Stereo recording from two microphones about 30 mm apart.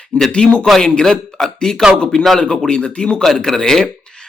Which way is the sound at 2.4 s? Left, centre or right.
Left.